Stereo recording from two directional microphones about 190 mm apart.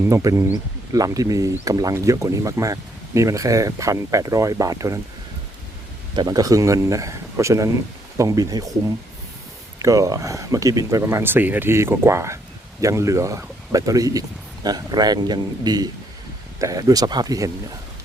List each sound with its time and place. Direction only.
0.0 s speech: 15° right (ahead or behind)
6.1 s speech: 20° right (ahead or behind)
9.7 s speech: 15° right (ahead or behind)